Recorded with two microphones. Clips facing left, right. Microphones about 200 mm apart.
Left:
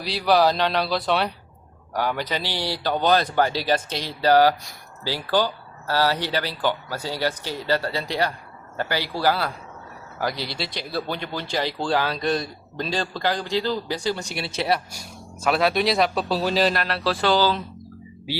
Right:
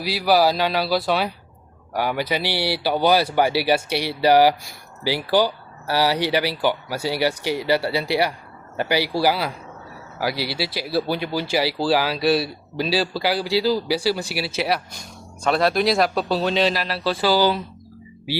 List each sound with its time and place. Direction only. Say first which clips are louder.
0.0 s speech: right 1 dB; 5° right (ahead or behind)